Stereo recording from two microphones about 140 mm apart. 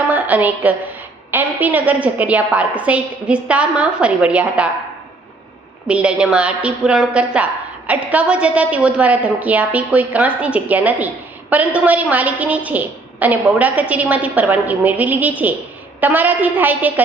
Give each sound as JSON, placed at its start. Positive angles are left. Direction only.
{"t": 0.1, "sound": "a sound", "side_deg": -10}
{"t": 1.3, "sound": "a woman's voice", "side_deg": -15}
{"t": 5.9, "sound": "a woman's voice", "side_deg": -10}